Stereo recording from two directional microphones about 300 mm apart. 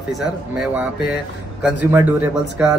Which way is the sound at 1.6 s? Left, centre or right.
Centre.